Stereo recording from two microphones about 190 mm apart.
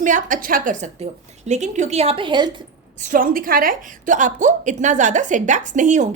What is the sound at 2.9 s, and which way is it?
A woman's voice, 40° right (ahead or behind).